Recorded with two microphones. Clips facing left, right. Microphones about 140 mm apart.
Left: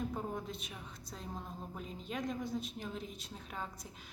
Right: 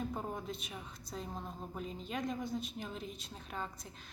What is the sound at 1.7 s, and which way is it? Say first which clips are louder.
Speech: right 2 dB; centre (ahead or behind).